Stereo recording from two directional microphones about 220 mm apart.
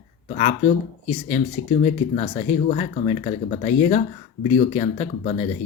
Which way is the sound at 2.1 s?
30° left (ahead or behind).